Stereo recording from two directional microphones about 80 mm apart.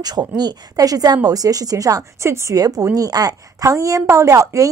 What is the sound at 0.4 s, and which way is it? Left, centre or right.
A woman's voice, right.